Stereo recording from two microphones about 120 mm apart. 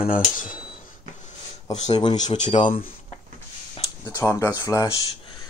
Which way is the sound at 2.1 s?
80° left.